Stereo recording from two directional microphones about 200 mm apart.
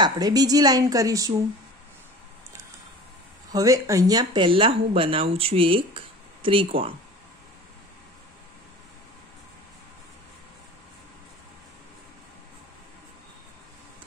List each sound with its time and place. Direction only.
0.0 s speech: 20° right (ahead or behind)
3.5 s speech: 15° right (ahead or behind)